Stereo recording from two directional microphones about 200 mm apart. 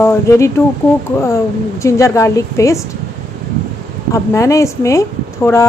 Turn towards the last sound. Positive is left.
turn(degrees=15)  # may be behind; listen again after turning